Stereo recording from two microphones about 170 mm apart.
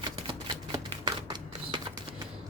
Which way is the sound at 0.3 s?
25° right (ahead or behind).